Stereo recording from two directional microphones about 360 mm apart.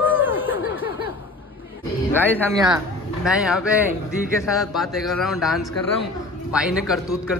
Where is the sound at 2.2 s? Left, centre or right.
Centre.